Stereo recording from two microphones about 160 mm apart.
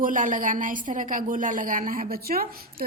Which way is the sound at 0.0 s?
55° right (ahead or behind).